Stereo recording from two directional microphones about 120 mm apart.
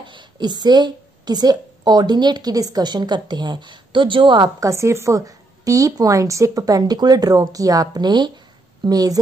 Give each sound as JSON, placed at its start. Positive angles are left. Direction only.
{"t": 0.0, "sound": "a woman's voice", "side_deg": -40}
{"t": 4.6, "sound": "a woman's voice", "side_deg": -25}